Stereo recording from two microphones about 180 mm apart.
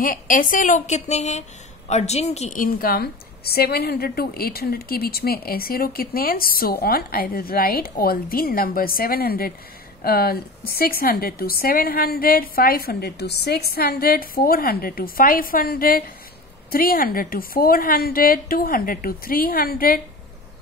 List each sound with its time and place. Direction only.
0.0 s a woman's voice: 50° left (ahead or behind)